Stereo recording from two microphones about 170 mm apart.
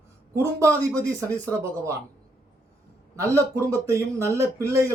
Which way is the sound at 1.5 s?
15° right (ahead or behind).